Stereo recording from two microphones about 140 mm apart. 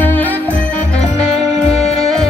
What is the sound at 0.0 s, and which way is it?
Music, 10° left (ahead or behind).